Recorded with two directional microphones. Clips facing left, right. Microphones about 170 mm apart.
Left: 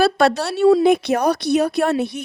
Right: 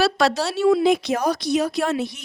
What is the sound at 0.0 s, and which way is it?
A woman's voice, 55° left (ahead or behind).